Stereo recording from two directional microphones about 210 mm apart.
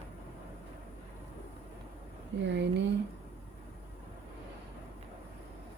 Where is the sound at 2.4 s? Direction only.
55° right (ahead or behind).